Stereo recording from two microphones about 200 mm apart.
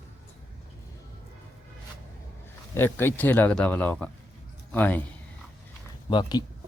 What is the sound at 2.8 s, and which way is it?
Speech, 10° left (ahead or behind).